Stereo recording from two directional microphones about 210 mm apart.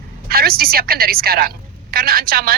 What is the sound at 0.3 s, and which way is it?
A woman's voice, 45° right (ahead or behind).